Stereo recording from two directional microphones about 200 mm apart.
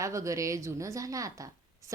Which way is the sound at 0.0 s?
15° right (ahead or behind).